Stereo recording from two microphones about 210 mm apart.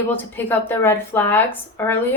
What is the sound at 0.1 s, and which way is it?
Speech, 10° left (ahead or behind).